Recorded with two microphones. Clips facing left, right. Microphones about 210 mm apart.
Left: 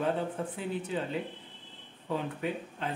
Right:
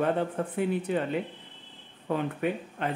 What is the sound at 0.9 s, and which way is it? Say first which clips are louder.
Speech: right 5 dB; 60° right (ahead or behind).